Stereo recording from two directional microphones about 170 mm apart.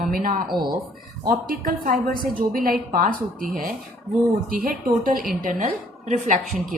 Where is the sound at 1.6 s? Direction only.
55° right (ahead or behind).